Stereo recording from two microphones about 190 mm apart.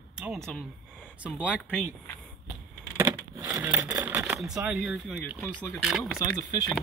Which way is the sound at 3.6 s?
5° right (ahead or behind).